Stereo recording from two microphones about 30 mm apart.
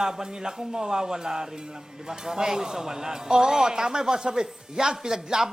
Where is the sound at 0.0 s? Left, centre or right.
Right.